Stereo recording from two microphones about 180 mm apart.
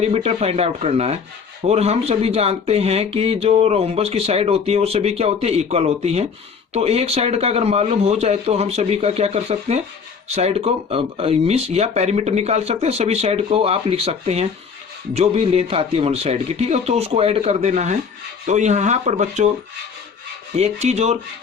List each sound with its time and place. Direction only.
0.0 s speech: 35° right (ahead or behind)
20.6 s speech: 40° right (ahead or behind)